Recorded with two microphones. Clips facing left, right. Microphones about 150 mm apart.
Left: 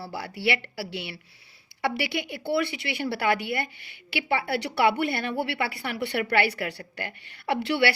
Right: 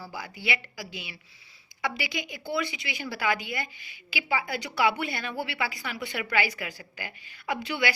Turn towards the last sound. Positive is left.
turn(degrees=70)  # may be behind; listen again after turning